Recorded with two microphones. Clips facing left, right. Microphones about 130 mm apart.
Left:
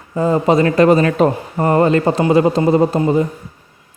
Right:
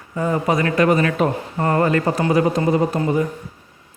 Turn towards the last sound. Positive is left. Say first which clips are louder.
# left 5 dB
turn(degrees=25)  # may be behind; listen again after turning